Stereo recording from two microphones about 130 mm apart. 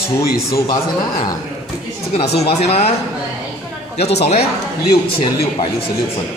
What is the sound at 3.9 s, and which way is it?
Speech, 55° left (ahead or behind).